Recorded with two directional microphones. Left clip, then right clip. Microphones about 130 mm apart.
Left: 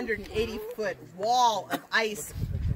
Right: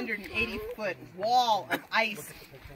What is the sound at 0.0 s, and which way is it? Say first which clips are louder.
Speech: left 2 dB; 20° left (ahead or behind).